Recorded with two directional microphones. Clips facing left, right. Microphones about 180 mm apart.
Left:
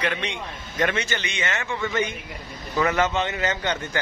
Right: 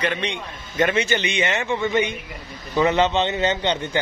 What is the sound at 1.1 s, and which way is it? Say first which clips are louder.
A man's voice: right 6 dB; 20° right (ahead or behind).